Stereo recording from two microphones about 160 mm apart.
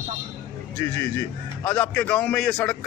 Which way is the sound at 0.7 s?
20° left (ahead or behind).